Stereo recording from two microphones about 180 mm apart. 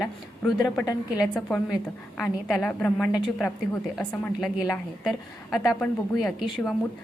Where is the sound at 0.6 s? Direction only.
20° left (ahead or behind).